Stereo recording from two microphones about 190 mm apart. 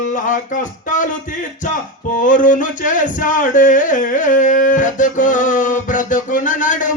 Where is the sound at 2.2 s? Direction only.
45° left (ahead or behind).